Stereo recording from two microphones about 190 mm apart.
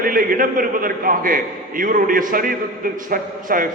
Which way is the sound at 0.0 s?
45° right (ahead or behind).